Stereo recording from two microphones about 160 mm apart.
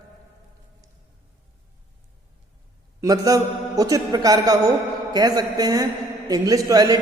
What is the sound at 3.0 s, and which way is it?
A man's voice, 20° right (ahead or behind).